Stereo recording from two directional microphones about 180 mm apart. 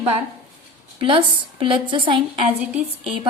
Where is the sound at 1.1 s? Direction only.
30° right (ahead or behind).